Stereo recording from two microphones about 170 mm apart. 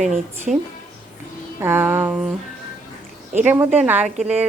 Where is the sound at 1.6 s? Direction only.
15° right (ahead or behind).